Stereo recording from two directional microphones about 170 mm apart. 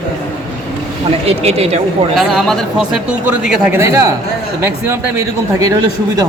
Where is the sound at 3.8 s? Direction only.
20° right (ahead or behind).